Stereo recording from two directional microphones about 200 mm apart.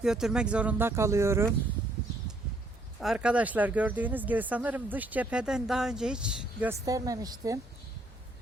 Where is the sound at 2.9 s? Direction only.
5° right (ahead or behind).